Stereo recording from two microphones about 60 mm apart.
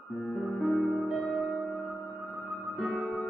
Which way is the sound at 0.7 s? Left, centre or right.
Centre.